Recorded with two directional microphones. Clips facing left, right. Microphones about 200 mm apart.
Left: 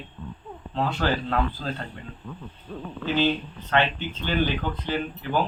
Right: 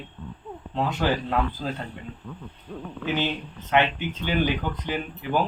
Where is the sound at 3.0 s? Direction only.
15° right (ahead or behind).